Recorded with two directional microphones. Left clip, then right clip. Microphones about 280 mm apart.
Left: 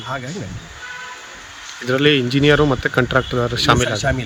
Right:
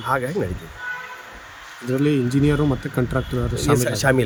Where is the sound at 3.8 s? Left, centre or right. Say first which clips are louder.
Right 1 dB; centre.